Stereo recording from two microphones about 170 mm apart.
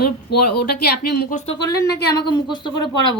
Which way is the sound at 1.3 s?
45° left (ahead or behind).